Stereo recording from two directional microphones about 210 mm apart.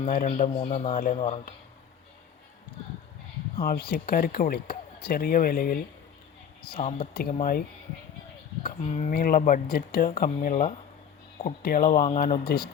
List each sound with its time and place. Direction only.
0.1 s a man's voice: 35° left (ahead or behind)
3.6 s speech: 45° left (ahead or behind)
6.7 s speech: 25° left (ahead or behind)
7.1 s speech: 45° left (ahead or behind)
8.8 s a man's voice: 30° left (ahead or behind)
9.1 s a man's voice: 45° left (ahead or behind)